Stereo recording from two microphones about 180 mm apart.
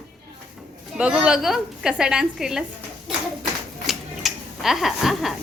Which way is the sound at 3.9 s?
Centre (ahead or behind).